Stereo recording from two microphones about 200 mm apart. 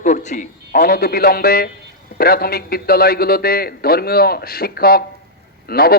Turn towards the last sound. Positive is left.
turn(degrees=50)  # may be behind; listen again after turning